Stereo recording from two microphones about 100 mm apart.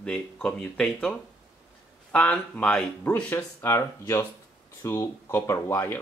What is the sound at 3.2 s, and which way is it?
Speech, 20° left (ahead or behind).